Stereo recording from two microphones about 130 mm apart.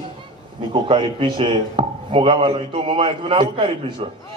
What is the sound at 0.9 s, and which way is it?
A man's voice, 40° right (ahead or behind).